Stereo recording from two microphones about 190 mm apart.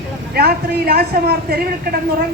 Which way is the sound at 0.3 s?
55° right (ahead or behind).